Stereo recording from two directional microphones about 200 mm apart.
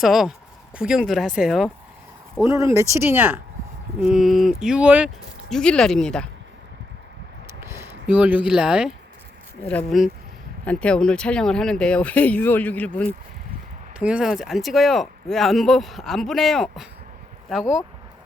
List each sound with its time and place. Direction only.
0.0 s speech: centre (ahead or behind)
2.4 s speech: 15° right (ahead or behind); by 6.2 s 5° left (ahead or behind)
7.6 s speech: 10° right (ahead or behind); by 13.1 s 5° left (ahead or behind)
14.0 s speech: 5° right (ahead or behind)